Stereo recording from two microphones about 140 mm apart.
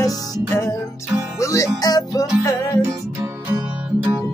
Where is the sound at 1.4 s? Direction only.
25° left (ahead or behind).